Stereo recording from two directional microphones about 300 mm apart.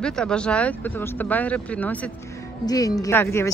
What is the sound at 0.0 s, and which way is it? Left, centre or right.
Speech, centre.